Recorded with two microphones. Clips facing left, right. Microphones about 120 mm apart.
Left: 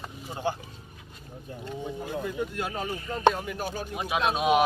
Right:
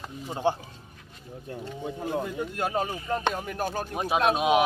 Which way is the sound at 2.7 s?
35° right (ahead or behind).